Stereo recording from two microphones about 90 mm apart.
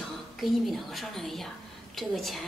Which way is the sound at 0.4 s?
Centre (ahead or behind).